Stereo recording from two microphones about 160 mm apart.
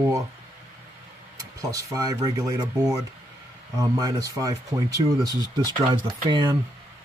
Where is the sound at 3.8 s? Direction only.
25° right (ahead or behind).